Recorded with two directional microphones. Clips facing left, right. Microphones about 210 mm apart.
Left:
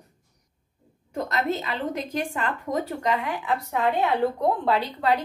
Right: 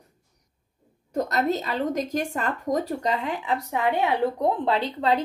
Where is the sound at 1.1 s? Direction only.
40° right (ahead or behind).